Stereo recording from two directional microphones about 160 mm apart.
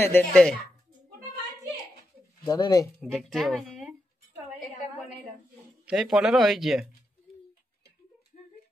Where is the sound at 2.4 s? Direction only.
25° left (ahead or behind).